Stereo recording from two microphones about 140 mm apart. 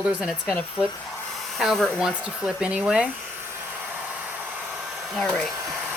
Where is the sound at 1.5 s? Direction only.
Centre (ahead or behind).